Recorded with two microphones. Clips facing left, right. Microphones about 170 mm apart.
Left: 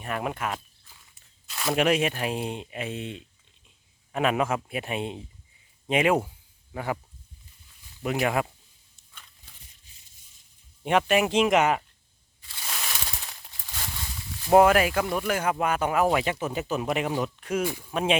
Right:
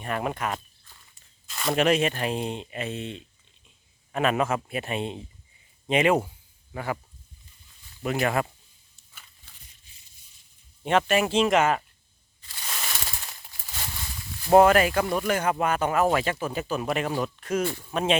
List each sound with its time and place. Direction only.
0.0 s speech: 5° left (ahead or behind)
8.1 s speech: 10° left (ahead or behind)
10.8 s speech: 15° left (ahead or behind)
12.6 s a sound: centre (ahead or behind)
14.4 s speech: 5° left (ahead or behind)